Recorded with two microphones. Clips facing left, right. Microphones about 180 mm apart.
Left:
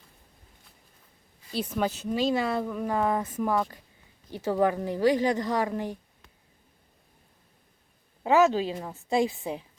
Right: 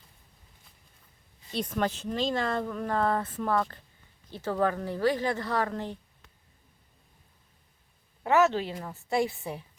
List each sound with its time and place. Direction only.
1.5 s speech: 5° left (ahead or behind)
8.2 s speech: 15° left (ahead or behind)